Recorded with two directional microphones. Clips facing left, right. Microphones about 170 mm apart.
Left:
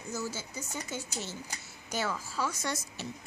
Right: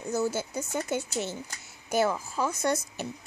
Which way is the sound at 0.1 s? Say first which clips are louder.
Right 9 dB; 60° right (ahead or behind).